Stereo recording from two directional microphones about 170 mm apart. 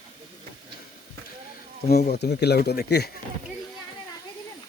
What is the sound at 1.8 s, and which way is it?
Speech, 70° left (ahead or behind).